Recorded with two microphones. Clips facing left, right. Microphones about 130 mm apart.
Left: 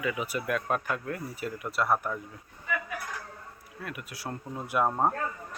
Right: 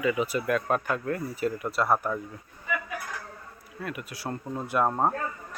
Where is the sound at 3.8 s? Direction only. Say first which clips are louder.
Right 4 dB; centre (ahead or behind).